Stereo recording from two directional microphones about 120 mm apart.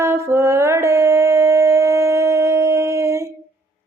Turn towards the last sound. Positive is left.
turn(degrees=-25)  # may be behind; listen again after turning